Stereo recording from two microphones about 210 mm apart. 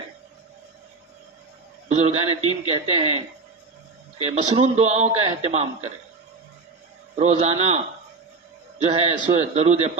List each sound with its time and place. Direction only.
1.9 s a man's voice: 30° right (ahead or behind)
4.4 s a man's voice: 30° right (ahead or behind)
7.2 s a man's voice: 30° right (ahead or behind)
8.8 s a man's voice: 30° right (ahead or behind)